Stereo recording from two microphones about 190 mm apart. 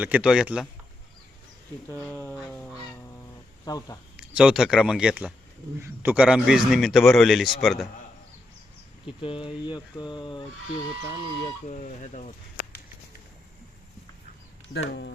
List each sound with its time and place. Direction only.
0.0 s a man's voice: 5° right (ahead or behind)
1.9 s speech: 10° left (ahead or behind)
3.7 s a sound: 20° left (ahead or behind)
4.2 s a man's voice: 5° right (ahead or behind)
9.2 s a sound: 25° left (ahead or behind)
11.7 s speech: 40° left (ahead or behind)
14.7 s speech: 65° left (ahead or behind)